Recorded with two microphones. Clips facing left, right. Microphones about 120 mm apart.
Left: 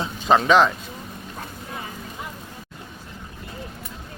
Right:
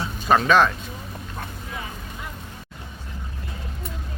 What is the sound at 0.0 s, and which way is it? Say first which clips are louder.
Music: left 1 dB; 20° left (ahead or behind).